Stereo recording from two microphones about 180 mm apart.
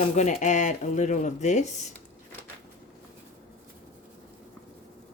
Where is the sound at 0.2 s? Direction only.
40° left (ahead or behind).